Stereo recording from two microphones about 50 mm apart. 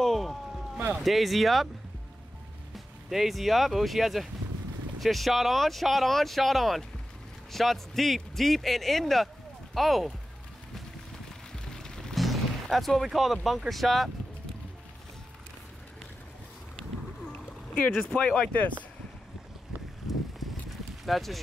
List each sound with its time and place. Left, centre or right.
0.0 s vehicle: centre
0.9 s speech: centre
2.7 s speech: centre
11.5 s a sound: centre
12.2 s speech: centre
17.3 s splash: left
18.0 s speech: centre
20.1 s a sound: centre